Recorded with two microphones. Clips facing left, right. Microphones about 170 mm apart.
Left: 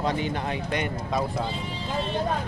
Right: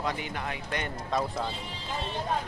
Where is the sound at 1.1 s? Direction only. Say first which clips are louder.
Left 1 dB; 5° left (ahead or behind).